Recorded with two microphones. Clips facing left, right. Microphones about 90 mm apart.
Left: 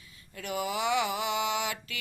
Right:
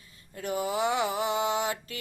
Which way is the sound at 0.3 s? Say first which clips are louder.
Right 3 dB; 40° right (ahead or behind).